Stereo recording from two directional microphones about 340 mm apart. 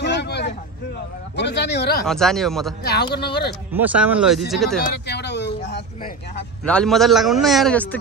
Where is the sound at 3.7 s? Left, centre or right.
Centre.